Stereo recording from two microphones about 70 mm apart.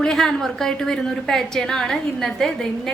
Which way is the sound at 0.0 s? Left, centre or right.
Centre.